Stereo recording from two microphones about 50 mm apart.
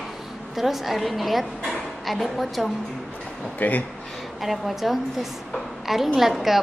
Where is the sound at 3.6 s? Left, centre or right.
Left.